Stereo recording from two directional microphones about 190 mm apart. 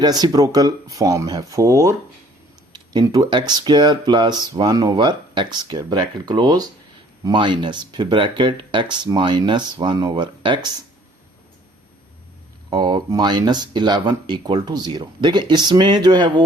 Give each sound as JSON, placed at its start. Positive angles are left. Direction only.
{"t": 0.0, "sound": "speech", "side_deg": -20}
{"t": 12.7, "sound": "speech", "side_deg": -20}